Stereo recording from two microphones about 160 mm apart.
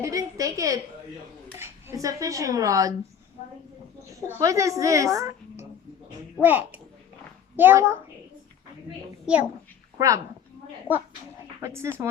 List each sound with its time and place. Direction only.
0.0 s a sound: 20° right (ahead or behind)
1.5 s speech: 15° right (ahead or behind)
4.3 s a woman's voice: 20° right (ahead or behind)
9.2 s a child's voice: 5° right (ahead or behind)
10.0 s a woman's voice: 20° right (ahead or behind)
10.9 s speech: 10° right (ahead or behind)